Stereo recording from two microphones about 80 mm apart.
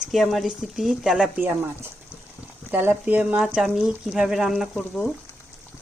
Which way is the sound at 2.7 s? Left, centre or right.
Right.